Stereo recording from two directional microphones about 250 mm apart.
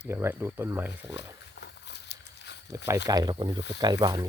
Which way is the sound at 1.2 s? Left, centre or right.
Left.